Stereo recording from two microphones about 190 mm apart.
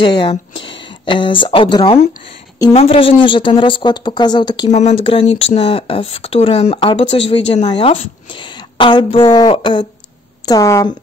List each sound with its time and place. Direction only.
0.0 s speech: 20° left (ahead or behind)
4.6 s speech: 35° left (ahead or behind); by 10.9 s 15° left (ahead or behind)